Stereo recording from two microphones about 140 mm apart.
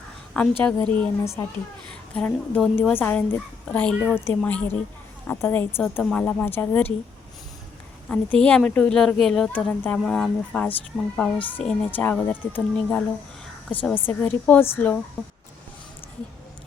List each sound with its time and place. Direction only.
0.3 s speech: 10° left (ahead or behind)
2.1 s speech: 10° left (ahead or behind)
8.1 s speech: 10° left (ahead or behind)
15.2 s speech: centre (ahead or behind)